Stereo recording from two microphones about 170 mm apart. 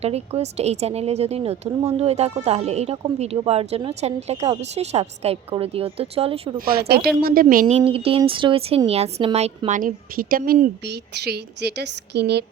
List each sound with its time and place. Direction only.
0.0 s speech: 40° right (ahead or behind)
6.7 s speech: 70° right (ahead or behind)
7.7 s a woman's voice: 35° right (ahead or behind); by 12.5 s 75° right (ahead or behind)